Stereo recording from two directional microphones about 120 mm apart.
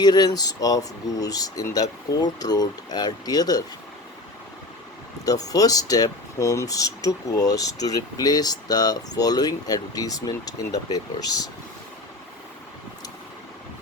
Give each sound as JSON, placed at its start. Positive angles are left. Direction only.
{"t": 0.0, "sound": "speech", "side_deg": 35}
{"t": 5.2, "sound": "speech", "side_deg": 30}